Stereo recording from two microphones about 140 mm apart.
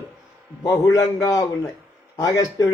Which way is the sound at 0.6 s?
25° left (ahead or behind).